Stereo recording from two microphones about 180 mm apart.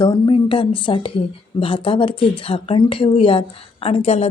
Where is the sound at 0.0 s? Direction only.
25° left (ahead or behind).